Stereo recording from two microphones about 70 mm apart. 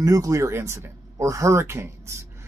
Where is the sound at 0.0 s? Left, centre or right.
Right.